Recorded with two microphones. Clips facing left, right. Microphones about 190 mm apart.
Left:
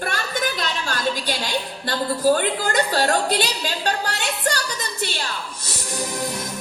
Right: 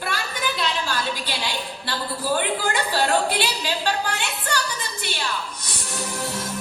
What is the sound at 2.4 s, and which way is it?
A woman's voice, 45° left (ahead or behind).